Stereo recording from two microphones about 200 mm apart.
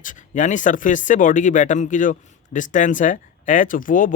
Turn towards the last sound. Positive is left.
turn(degrees=40)  # may be behind; listen again after turning